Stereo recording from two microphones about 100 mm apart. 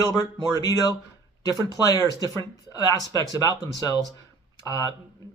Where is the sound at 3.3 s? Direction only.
40° left (ahead or behind).